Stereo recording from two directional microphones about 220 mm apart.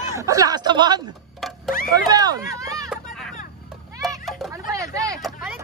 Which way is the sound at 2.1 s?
15° right (ahead or behind).